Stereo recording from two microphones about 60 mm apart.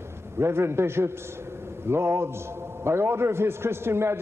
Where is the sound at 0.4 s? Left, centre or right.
Right.